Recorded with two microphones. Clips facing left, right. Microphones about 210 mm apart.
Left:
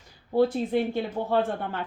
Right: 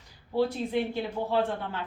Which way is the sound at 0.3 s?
50° left (ahead or behind).